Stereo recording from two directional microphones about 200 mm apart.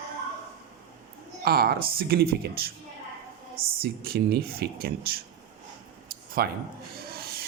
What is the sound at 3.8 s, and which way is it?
A man's voice, 50° right (ahead or behind).